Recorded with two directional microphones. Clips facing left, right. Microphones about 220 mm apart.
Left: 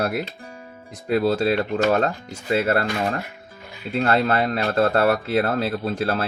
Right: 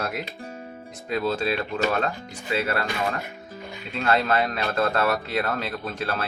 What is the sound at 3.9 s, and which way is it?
Speech, 35° left (ahead or behind).